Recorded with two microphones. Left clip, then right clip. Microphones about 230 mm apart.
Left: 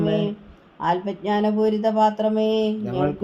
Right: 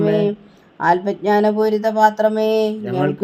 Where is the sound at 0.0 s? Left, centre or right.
Right.